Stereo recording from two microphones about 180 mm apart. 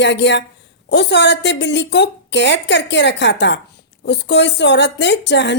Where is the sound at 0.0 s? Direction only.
75° left (ahead or behind).